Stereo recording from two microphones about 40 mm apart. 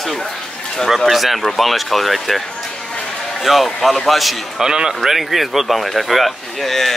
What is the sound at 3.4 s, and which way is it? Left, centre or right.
Speech, centre.